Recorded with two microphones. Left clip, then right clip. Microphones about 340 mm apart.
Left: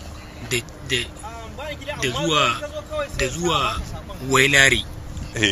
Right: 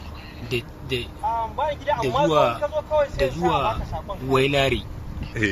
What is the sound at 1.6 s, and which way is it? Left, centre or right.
Speech, right.